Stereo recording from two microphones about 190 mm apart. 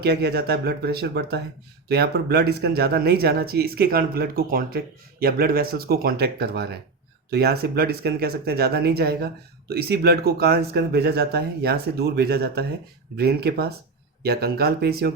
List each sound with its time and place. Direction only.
0.0 s speech: 60° right (ahead or behind)